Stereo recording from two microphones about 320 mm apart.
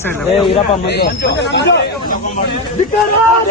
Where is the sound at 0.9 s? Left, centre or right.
Left.